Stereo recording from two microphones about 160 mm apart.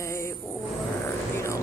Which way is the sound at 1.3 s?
15° left (ahead or behind).